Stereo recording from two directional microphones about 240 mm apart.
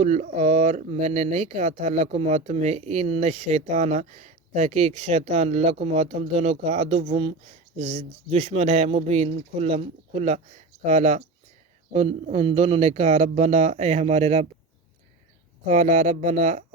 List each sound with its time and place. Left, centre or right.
0.0 s speech: right
15.6 s speech: right